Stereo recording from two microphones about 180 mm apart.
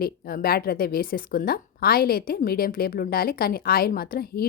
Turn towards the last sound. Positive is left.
turn(degrees=55)  # may be behind; listen again after turning